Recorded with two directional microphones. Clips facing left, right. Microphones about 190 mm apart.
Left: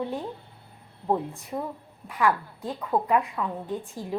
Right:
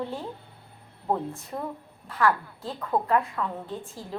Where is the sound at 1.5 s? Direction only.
5° left (ahead or behind).